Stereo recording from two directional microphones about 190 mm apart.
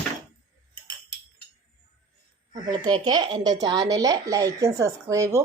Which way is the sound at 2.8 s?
25° right (ahead or behind).